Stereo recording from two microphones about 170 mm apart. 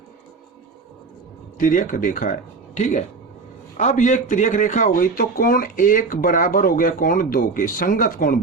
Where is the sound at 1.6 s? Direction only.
50° left (ahead or behind).